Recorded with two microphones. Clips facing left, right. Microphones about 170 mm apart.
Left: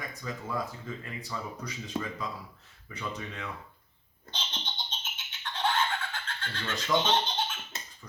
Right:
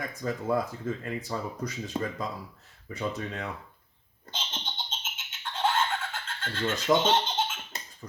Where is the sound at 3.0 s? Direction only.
40° right (ahead or behind).